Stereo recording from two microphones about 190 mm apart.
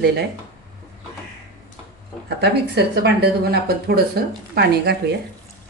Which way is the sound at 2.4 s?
60° right (ahead or behind).